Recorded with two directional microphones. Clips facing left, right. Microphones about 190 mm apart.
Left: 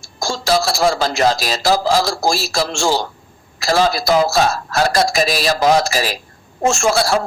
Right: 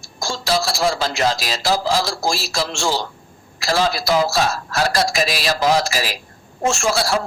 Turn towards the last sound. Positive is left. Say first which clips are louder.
# left 4 dB
turn(degrees=50)  # may be behind; listen again after turning